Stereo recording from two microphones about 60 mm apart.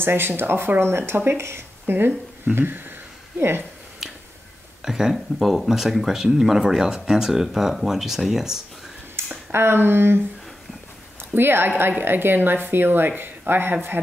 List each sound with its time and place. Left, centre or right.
0.0 s speech: right
4.0 s finger snapping: centre
4.8 s speech: centre
9.2 s a sound: right
9.5 s speech: right